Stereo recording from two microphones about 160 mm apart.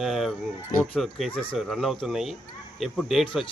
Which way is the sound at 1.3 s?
35° left (ahead or behind).